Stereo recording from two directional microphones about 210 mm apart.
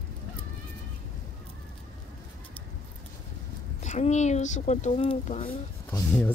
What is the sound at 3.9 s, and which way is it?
Speech, 35° left (ahead or behind).